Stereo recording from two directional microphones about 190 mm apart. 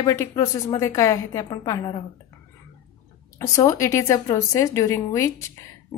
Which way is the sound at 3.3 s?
15° left (ahead or behind).